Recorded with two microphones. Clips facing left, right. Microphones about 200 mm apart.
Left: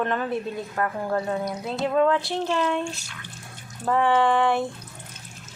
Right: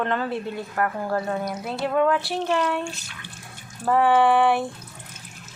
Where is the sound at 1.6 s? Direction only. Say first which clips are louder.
Left 1 dB; 20° left (ahead or behind).